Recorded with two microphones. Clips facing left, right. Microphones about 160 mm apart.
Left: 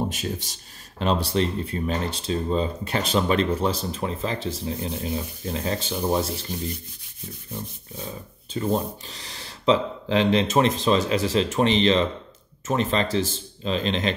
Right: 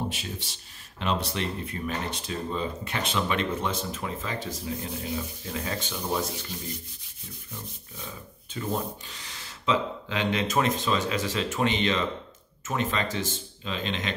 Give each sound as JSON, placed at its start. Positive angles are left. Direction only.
{"t": 0.1, "sound": "speech", "side_deg": 40}
{"t": 8.5, "sound": "speech", "side_deg": 35}